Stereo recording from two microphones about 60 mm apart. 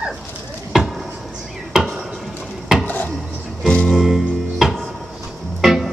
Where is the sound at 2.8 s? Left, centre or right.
Left.